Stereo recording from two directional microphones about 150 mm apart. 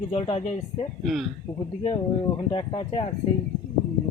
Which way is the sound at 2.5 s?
35° left (ahead or behind).